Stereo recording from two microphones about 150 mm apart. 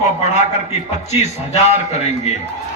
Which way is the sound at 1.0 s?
50° left (ahead or behind).